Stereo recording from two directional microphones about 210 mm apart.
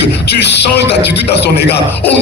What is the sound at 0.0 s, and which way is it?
A man's voice, 55° left (ahead or behind).